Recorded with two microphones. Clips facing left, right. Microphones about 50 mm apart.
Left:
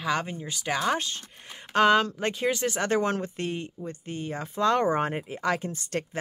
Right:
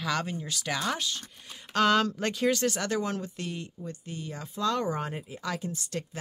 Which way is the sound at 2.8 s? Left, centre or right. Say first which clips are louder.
Left 5 dB; left.